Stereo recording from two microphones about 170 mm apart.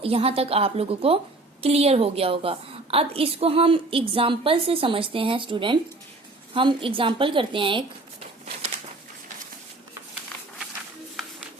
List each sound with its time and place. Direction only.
0.0 s a woman's voice: 35° right (ahead or behind)